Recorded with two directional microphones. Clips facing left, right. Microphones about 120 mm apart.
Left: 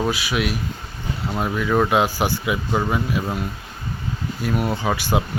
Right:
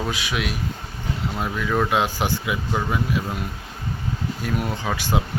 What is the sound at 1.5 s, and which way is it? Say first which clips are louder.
Speech: left 4 dB; 15° left (ahead or behind).